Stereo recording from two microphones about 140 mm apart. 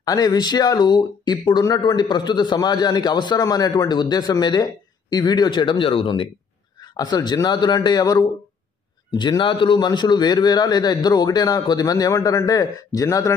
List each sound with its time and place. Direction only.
0.0 s speech: 25° left (ahead or behind)